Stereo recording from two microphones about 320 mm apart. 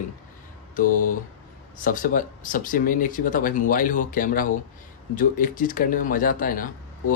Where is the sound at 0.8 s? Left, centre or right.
Left.